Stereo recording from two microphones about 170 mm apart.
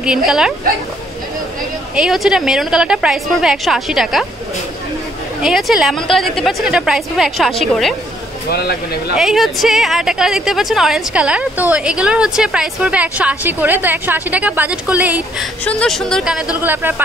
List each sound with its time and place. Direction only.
0.0 s a woman's voice: 5° right (ahead or behind)
2.0 s a woman's voice: 5° right (ahead or behind)
5.4 s a woman's voice: centre (ahead or behind)
8.5 s speech: 70° left (ahead or behind)
9.1 s a woman's voice: 5° right (ahead or behind)
15.6 s a woman's voice: 5° left (ahead or behind)
16.6 s speech: 10° right (ahead or behind)